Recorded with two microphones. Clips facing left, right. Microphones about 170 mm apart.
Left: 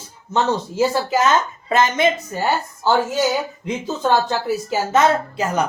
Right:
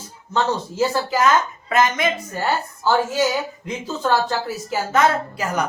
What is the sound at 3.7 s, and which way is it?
A woman's voice, 20° left (ahead or behind).